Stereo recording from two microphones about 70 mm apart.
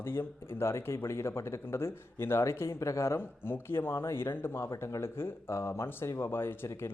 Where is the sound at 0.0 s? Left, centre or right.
Left.